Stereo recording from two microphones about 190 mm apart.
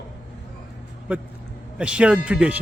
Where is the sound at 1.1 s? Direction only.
10° right (ahead or behind).